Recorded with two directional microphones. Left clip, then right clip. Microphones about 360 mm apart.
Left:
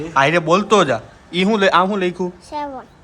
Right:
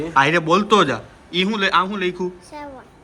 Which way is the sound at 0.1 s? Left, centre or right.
Centre.